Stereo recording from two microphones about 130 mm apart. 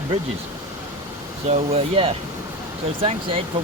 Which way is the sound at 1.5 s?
50° right (ahead or behind).